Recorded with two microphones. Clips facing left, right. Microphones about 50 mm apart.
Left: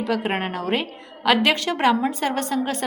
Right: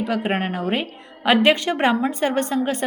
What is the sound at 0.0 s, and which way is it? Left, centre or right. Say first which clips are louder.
Speech: even; right.